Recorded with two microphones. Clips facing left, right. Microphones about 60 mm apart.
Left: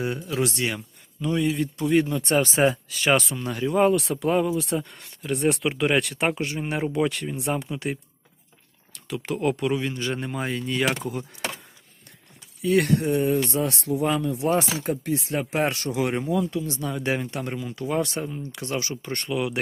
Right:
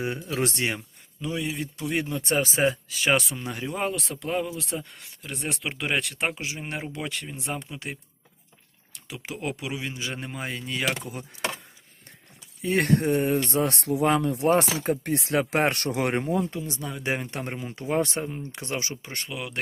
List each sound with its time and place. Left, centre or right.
0.2 s speech: centre
0.4 s speech: right
1.2 s speech: centre
9.0 s speech: centre
12.6 s speech: right
15.2 s speech: right
16.3 s speech: right
19.0 s speech: centre